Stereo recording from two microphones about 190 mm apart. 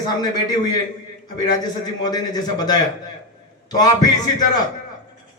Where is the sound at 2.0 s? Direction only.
20° left (ahead or behind).